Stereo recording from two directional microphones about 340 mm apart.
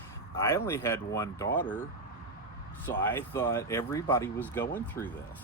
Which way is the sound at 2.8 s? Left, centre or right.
Centre.